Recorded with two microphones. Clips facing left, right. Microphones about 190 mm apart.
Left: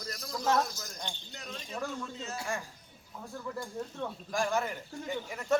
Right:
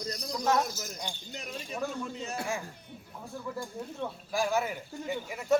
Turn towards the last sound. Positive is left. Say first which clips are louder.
# right 2 dB
turn(degrees=-10)  # may be behind; listen again after turning